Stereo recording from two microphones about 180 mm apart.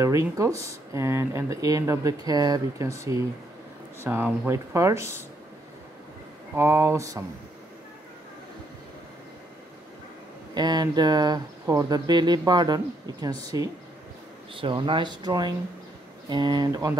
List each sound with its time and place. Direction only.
0.0 s speech: 15° right (ahead or behind)
6.5 s speech: 15° right (ahead or behind)
10.5 s speech: 25° right (ahead or behind)